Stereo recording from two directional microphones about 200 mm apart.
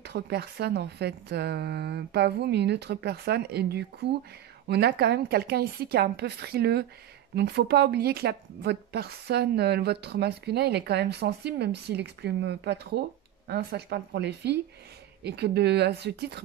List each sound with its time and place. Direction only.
0.0 s a woman's voice: 55° right (ahead or behind)